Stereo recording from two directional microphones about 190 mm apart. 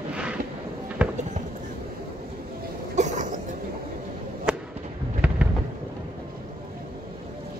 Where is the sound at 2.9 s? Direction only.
40° right (ahead or behind).